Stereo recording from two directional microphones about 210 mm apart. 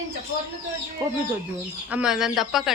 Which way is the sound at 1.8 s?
5° right (ahead or behind).